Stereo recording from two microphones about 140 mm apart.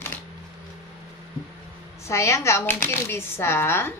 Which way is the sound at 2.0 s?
20° left (ahead or behind).